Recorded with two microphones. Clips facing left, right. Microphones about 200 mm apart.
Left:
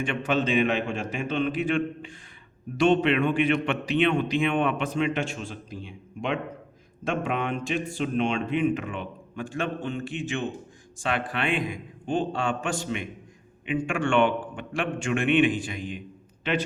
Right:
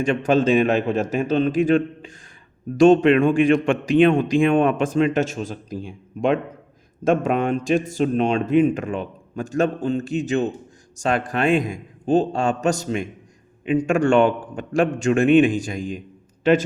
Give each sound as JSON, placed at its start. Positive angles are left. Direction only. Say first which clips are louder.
{"t": 0.0, "sound": "a man's voice", "louder": "right 8 dB", "side_deg": -40}